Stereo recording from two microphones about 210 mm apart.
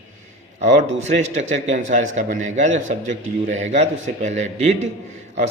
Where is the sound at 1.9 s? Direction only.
35° right (ahead or behind).